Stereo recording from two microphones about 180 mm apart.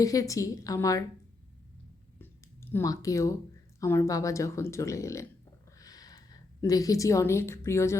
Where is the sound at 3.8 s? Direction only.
15° left (ahead or behind).